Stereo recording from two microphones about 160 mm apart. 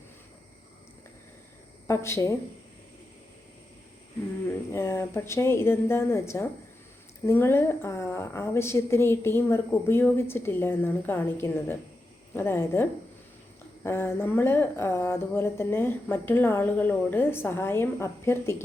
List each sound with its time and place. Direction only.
1.9 s speech: 15° left (ahead or behind)
4.4 s speech: 15° left (ahead or behind)